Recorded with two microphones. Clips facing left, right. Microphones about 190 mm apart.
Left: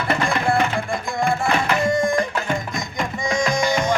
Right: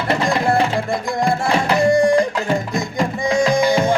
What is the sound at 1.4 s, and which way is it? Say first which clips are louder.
Tabla: right 4 dB; 35° right (ahead or behind).